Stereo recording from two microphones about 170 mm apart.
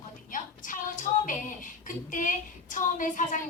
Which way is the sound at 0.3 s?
50° left (ahead or behind).